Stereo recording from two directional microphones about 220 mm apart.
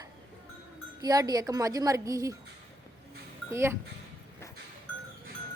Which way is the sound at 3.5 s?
10° right (ahead or behind).